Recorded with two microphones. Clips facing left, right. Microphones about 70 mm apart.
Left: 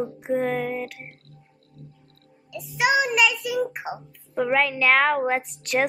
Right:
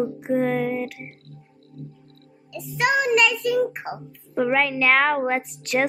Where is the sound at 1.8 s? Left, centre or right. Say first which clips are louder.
Right 8 dB; left.